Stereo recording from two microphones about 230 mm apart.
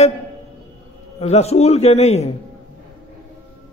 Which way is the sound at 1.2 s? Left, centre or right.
Left.